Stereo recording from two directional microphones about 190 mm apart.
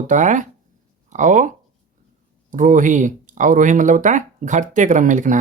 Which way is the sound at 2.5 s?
45° right (ahead or behind).